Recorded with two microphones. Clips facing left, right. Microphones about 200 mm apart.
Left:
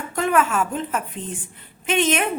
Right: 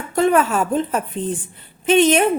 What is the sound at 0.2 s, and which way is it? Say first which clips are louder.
A woman's voice: right 4 dB; 35° right (ahead or behind).